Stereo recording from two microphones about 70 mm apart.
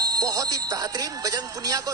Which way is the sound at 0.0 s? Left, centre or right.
Right.